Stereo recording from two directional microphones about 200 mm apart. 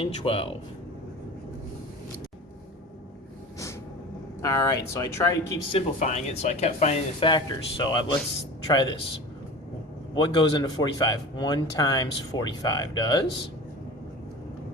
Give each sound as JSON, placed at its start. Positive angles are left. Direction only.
{"t": 0.0, "sound": "speech", "side_deg": 25}
{"t": 4.4, "sound": "speech", "side_deg": 15}
{"t": 5.7, "sound": "speech", "side_deg": 35}
{"t": 10.2, "sound": "speech", "side_deg": 20}